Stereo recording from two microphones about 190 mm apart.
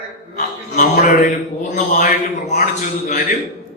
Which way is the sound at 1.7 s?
45° left (ahead or behind).